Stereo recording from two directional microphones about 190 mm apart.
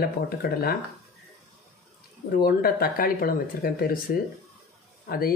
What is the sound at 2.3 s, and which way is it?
Speech, 50° left (ahead or behind).